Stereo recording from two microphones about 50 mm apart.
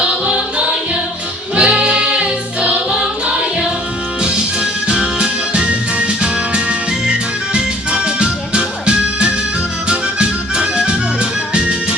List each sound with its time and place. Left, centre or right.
0.0 s music: right
4.2 s music: centre